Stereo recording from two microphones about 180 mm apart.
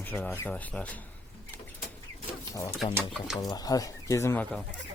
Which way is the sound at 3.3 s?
20° left (ahead or behind).